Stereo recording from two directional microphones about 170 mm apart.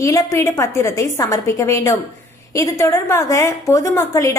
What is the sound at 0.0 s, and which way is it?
A woman's voice, 20° left (ahead or behind).